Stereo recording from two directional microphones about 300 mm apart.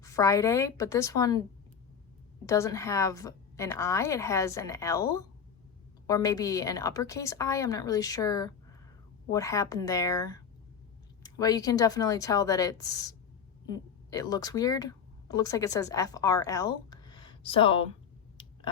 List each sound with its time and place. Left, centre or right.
0.0 s a woman's voice: centre
2.5 s a woman's voice: centre
16.9 s a sound: centre